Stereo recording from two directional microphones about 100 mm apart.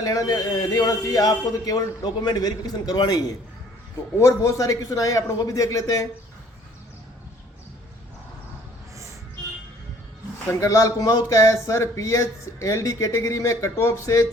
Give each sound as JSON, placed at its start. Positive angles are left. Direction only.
{"t": 0.0, "sound": "speech", "side_deg": 35}
{"t": 10.6, "sound": "speech", "side_deg": 35}